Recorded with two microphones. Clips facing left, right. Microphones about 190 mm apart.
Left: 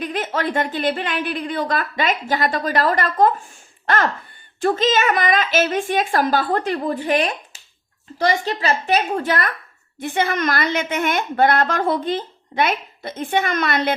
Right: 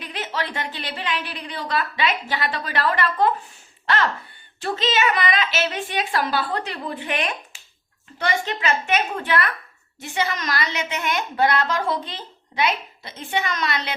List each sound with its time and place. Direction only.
0.0 s a woman's voice: 50° left (ahead or behind)
10.0 s speech: 55° left (ahead or behind)